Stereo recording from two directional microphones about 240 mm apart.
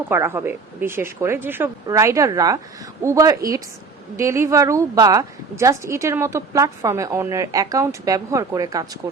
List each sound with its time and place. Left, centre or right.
0.1 s a woman's voice: centre